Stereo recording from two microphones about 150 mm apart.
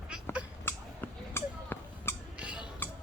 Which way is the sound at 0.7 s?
15° left (ahead or behind).